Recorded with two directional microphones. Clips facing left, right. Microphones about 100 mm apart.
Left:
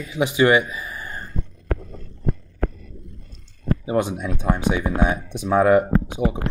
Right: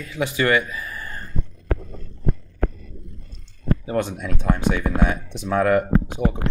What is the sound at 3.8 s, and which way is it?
Speech, 15° left (ahead or behind).